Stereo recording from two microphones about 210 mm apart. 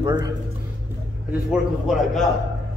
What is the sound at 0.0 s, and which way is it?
Speech, 20° right (ahead or behind).